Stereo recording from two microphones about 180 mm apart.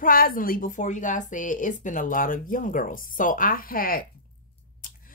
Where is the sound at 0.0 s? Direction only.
50° left (ahead or behind).